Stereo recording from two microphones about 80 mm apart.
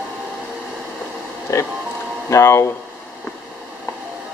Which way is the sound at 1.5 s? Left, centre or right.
Left.